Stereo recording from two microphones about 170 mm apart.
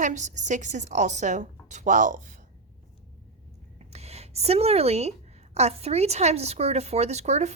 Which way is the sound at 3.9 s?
40° right (ahead or behind).